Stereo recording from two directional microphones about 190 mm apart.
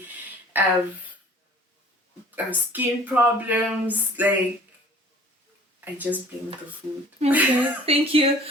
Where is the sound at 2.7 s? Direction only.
10° right (ahead or behind).